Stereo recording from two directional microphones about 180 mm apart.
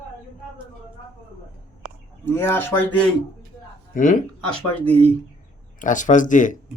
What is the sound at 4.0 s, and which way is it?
Speech, 45° left (ahead or behind).